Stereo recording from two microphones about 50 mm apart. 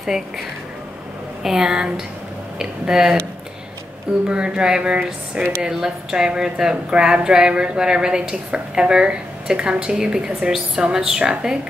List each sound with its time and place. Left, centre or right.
0.0 s a woman's voice: centre
4.3 s a sound: centre
5.6 s a woman's voice: centre